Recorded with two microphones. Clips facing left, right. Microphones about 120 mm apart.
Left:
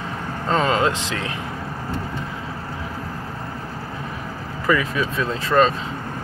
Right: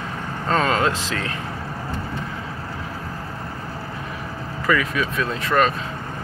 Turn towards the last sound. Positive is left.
turn(degrees=25)  # may be behind; listen again after turning